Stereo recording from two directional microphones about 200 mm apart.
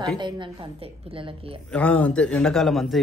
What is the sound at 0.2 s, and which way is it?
A woman's voice, 25° right (ahead or behind).